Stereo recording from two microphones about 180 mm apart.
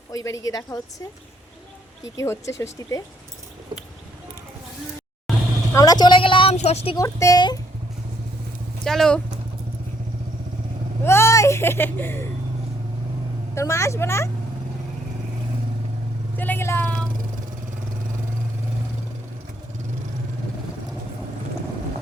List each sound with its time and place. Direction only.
0.1 s a woman's voice: 20° left (ahead or behind)
2.1 s speech: 15° left (ahead or behind)
5.7 s a woman's voice: 20° left (ahead or behind)
6.8 s a woman's voice: 20° left (ahead or behind)
8.8 s speech: 5° left (ahead or behind)
11.0 s speech: 15° left (ahead or behind)
13.6 s speech: 15° left (ahead or behind)
16.4 s vehicle: 10° left (ahead or behind)